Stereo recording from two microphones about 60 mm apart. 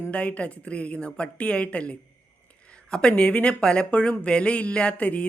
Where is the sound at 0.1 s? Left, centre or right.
Left.